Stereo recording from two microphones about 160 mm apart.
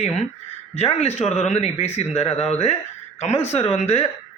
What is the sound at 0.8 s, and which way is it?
A man's voice, 40° left (ahead or behind).